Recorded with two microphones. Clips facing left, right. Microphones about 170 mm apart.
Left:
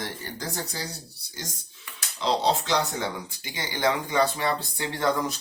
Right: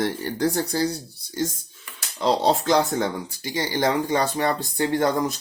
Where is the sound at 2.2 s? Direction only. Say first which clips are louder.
Right 4 dB; 45° right (ahead or behind).